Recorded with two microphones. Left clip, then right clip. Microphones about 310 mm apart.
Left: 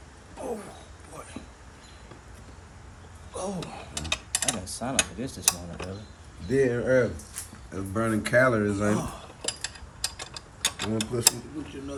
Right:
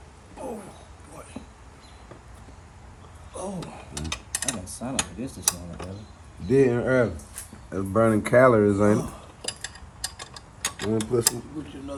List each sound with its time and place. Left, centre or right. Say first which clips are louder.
0.4 s a sound: left 1 dB; centre
3.3 s mechanisms: left 1 dB; centre
6.5 s speech: right 2 dB; centre
9.4 s mechanisms: left 1 dB; centre